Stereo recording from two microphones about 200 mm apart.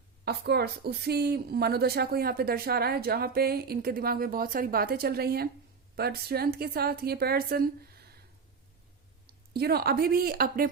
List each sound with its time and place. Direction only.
0.3 s a woman's voice: 55° right (ahead or behind)
9.2 s speech: 50° right (ahead or behind)